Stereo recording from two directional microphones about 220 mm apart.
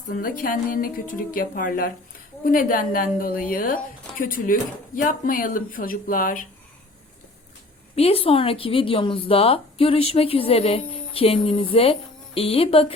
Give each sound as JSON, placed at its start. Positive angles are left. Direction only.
{"t": 0.1, "sound": "speech", "side_deg": 40}
{"t": 7.9, "sound": "a woman's voice", "side_deg": 25}